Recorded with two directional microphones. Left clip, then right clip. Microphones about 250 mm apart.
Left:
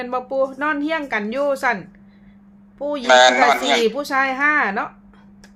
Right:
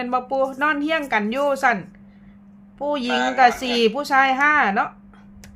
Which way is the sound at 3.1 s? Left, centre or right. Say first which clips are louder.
Left 6 dB; left.